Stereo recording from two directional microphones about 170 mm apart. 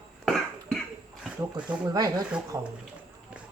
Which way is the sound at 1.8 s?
25° right (ahead or behind).